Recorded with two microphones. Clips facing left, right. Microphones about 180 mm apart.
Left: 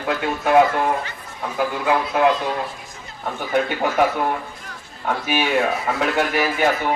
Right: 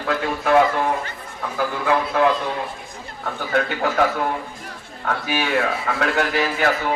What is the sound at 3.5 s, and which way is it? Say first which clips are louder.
Speech: left 1 dB; 20° left (ahead or behind).